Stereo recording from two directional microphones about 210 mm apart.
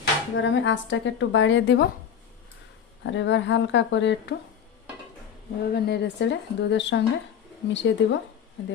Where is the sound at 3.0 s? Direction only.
60° left (ahead or behind).